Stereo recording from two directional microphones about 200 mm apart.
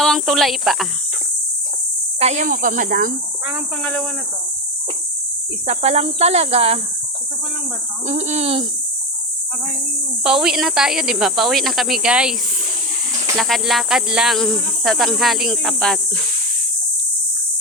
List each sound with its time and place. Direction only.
0.0 s speech: centre (ahead or behind)
2.1 s speech: 35° right (ahead or behind)
3.8 s speech: 5° left (ahead or behind)
5.6 s speech: 30° right (ahead or behind)
8.0 s speech: 35° right (ahead or behind)
10.2 s speech: 5° right (ahead or behind)
13.3 s speech: centre (ahead or behind)